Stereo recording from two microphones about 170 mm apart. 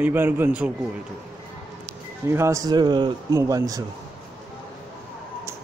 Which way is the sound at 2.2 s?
15° right (ahead or behind).